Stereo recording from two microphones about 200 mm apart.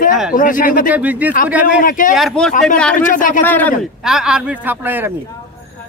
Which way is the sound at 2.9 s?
40° left (ahead or behind).